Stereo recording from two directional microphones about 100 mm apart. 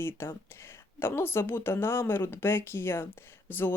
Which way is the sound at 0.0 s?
25° left (ahead or behind).